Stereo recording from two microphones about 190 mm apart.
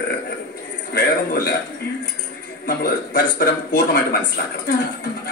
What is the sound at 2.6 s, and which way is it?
A man's voice, 50° left (ahead or behind).